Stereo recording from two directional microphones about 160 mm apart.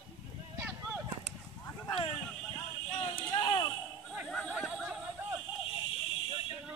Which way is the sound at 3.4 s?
30° left (ahead or behind).